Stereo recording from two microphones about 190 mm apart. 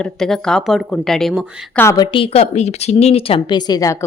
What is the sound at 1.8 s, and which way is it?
Speech, 15° left (ahead or behind).